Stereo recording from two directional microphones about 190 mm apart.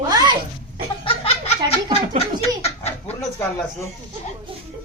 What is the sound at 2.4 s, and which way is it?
Bird, 35° left (ahead or behind).